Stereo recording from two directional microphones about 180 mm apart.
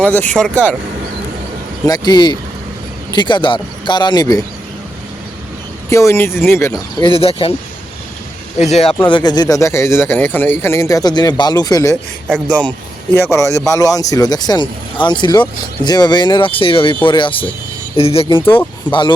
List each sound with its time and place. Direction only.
0.0 s speech: 10° left (ahead or behind)
1.9 s speech: 25° left (ahead or behind)
5.9 s speech: 15° left (ahead or behind)
7.0 s speech: 30° left (ahead or behind)
8.5 s speech: 40° left (ahead or behind)
9.0 s speech: 25° left (ahead or behind)
12.5 s speech: 5° left (ahead or behind); by 19.1 s 25° left (ahead or behind)